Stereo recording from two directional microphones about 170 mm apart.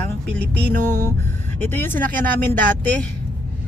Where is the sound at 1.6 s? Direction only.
10° left (ahead or behind).